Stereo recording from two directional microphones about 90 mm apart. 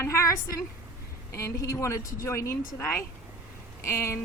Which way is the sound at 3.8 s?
30° left (ahead or behind).